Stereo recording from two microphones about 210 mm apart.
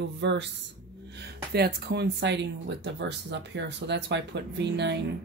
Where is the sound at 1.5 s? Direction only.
50° right (ahead or behind).